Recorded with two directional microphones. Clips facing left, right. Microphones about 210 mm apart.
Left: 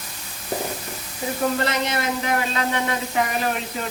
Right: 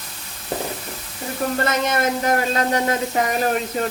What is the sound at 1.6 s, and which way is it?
Speech, 50° right (ahead or behind).